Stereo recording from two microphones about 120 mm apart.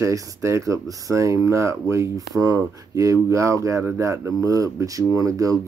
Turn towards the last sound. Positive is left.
turn(degrees=-30)  # may be behind; listen again after turning